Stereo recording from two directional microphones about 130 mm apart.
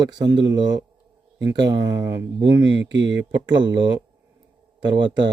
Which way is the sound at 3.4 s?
35° right (ahead or behind).